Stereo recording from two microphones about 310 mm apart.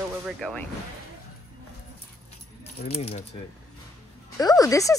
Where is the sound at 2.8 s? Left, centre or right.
Centre.